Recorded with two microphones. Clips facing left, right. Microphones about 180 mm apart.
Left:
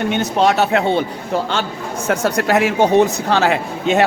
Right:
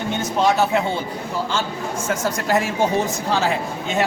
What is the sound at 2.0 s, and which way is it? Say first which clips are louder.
A man's voice: left 6 dB; 65° left (ahead or behind).